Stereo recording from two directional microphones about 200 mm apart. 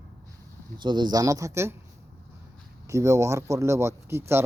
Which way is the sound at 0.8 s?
20° right (ahead or behind).